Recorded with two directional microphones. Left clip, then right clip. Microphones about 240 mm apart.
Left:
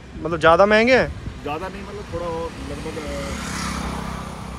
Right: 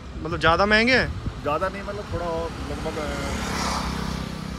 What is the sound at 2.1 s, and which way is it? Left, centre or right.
Speech, right.